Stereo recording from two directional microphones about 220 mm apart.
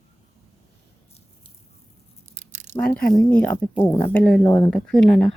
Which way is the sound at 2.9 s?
5° left (ahead or behind).